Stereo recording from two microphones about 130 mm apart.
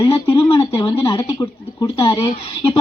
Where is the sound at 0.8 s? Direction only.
40° left (ahead or behind).